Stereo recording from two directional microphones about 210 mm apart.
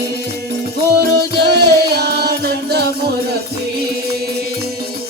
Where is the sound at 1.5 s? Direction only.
55° right (ahead or behind).